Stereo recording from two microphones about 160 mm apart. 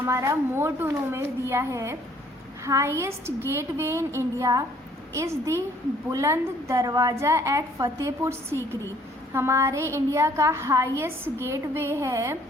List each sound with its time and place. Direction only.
0.0 s a woman's voice: 15° right (ahead or behind)